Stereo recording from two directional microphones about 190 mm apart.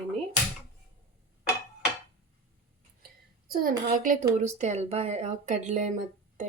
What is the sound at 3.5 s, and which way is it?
Speech, 45° right (ahead or behind).